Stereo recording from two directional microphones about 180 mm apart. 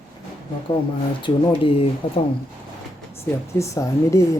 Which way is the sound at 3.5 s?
15° left (ahead or behind).